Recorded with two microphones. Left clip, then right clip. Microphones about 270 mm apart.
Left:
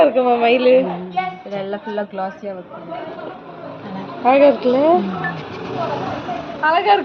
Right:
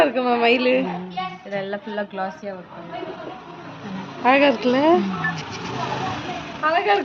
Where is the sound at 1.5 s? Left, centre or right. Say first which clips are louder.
Left 1 dB; right.